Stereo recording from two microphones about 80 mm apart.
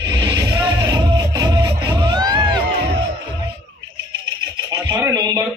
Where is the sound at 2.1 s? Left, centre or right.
Right.